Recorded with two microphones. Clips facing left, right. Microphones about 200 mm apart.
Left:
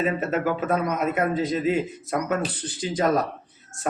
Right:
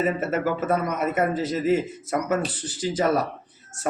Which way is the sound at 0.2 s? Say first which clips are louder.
Even; 5° right (ahead or behind).